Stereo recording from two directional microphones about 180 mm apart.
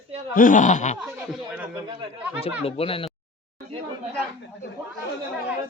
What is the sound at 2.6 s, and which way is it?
Speech, 30° left (ahead or behind).